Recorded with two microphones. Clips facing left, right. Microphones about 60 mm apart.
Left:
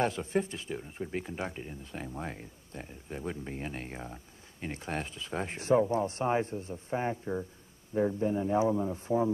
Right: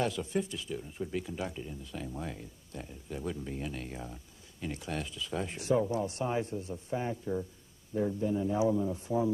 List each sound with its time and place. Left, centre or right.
0.0 s speech: left